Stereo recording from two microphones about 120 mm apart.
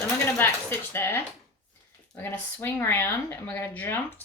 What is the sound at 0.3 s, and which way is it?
A woman's voice, 15° left (ahead or behind).